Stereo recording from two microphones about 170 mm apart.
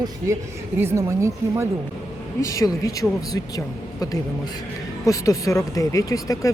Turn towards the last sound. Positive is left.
turn(degrees=20)  # may be behind; listen again after turning